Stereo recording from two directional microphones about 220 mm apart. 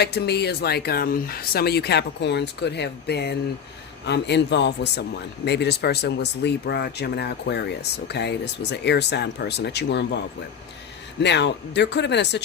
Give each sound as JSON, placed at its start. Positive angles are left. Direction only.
{"t": 0.0, "sound": "speech", "side_deg": 50}
{"t": 11.2, "sound": "speech", "side_deg": 50}